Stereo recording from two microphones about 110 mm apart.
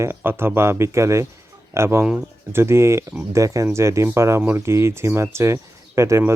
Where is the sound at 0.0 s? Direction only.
20° right (ahead or behind).